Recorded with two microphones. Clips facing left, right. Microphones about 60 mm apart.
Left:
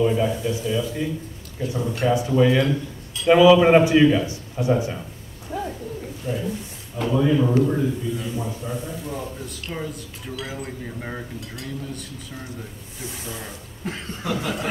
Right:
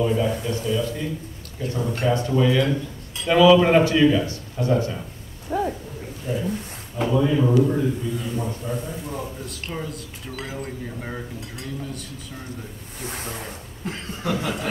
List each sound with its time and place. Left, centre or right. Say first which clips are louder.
0.0 s a man's voice: left 1 dB; centre
5.5 s bird: right 5 dB; right
6.2 s a man's voice: right 1 dB; centre
13.0 s speech: right 2 dB; right
13.8 s a man's voice: right 1 dB; centre